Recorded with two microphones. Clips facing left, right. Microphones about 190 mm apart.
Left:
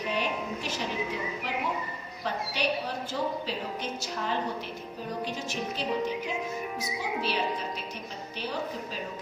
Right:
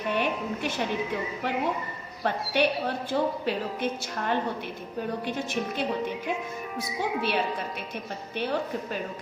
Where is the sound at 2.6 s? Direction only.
60° right (ahead or behind).